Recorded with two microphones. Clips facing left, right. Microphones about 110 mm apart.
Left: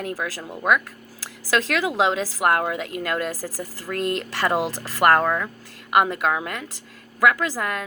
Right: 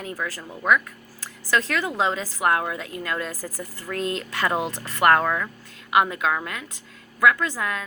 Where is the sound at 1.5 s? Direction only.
75° left (ahead or behind).